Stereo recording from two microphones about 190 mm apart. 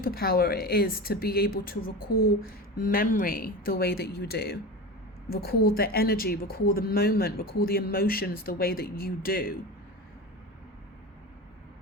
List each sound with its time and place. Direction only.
0.0 s speech: 50° left (ahead or behind)